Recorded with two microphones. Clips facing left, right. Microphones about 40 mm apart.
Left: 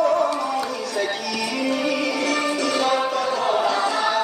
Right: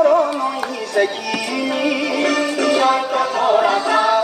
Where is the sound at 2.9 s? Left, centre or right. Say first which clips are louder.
Right 4 dB; right.